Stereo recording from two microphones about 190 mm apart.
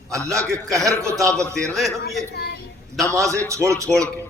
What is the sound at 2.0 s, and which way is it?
Speech, 55° left (ahead or behind).